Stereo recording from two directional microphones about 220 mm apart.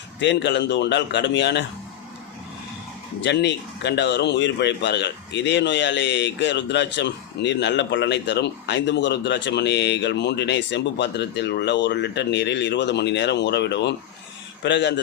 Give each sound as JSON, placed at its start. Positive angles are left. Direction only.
{"t": 0.2, "sound": "speech", "side_deg": 55}
{"t": 3.2, "sound": "speech", "side_deg": 50}